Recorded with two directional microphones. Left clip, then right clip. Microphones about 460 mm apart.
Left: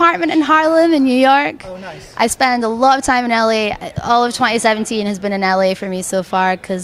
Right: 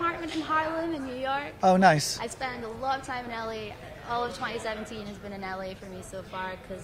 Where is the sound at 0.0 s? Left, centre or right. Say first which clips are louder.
Left 18 dB; left.